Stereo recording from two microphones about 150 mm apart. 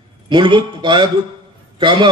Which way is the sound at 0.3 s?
30° right (ahead or behind).